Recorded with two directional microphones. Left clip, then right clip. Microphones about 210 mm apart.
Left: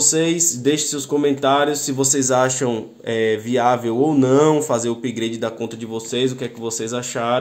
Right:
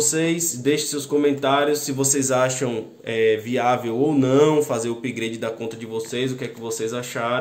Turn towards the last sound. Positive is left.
turn(degrees=40)  # may be behind; listen again after turning